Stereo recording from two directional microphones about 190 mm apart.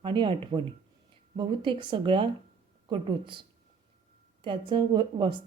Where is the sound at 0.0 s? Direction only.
25° right (ahead or behind).